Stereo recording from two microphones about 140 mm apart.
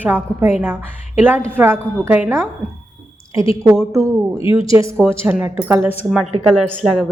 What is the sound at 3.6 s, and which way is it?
Speech, centre (ahead or behind).